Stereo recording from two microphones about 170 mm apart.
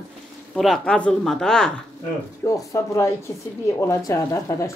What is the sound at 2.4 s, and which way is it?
Speech, 20° left (ahead or behind).